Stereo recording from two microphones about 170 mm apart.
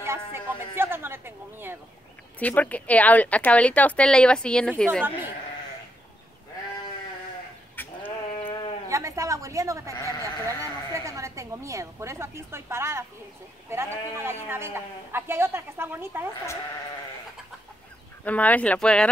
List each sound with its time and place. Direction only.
0.0 s speech: 15° right (ahead or behind)
2.3 s speech: 10° left (ahead or behind)
7.7 s goat: 10° left (ahead or behind)
8.5 s sheep: 30° left (ahead or behind)
8.8 s a woman's voice: 20° right (ahead or behind)
9.9 s speech: 25° left (ahead or behind)
10.4 s speech: 20° right (ahead or behind)
14.1 s a woman's voice: 15° right (ahead or behind)
18.2 s speech: 10° left (ahead or behind)